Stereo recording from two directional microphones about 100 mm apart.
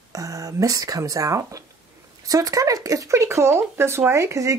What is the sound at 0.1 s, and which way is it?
Speech, 35° right (ahead or behind).